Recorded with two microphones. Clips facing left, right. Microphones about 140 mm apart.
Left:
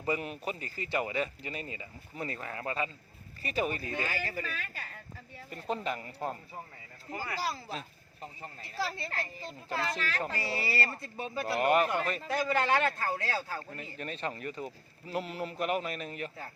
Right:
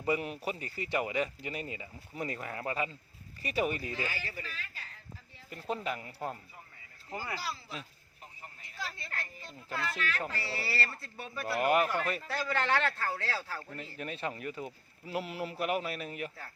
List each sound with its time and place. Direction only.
0.0 s speech: 10° right (ahead or behind)
4.0 s speech: 45° left (ahead or behind)
5.5 s speech: 5° right (ahead or behind)
7.4 s speech: 40° left (ahead or behind)
8.2 s speech: 90° left
8.8 s speech: 30° left (ahead or behind)
10.3 s speech: 15° left (ahead or behind)
11.6 s speech: 5° right (ahead or behind)
12.3 s a man's voice: 15° left (ahead or behind)
13.9 s speech: 10° right (ahead or behind)